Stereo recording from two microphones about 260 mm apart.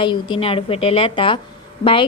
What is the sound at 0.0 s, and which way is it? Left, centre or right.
A woman's voice, centre.